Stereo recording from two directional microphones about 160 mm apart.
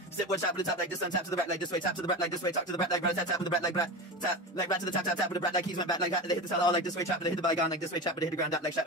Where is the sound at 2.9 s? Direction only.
20° left (ahead or behind).